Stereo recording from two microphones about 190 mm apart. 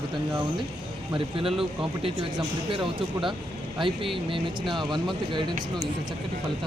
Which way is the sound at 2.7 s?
25° right (ahead or behind).